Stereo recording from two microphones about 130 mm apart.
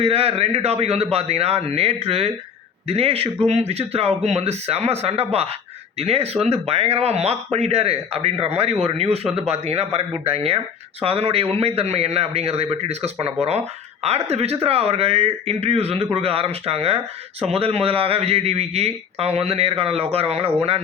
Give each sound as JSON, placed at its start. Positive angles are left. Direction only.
{"t": 0.0, "sound": "speech", "side_deg": -50}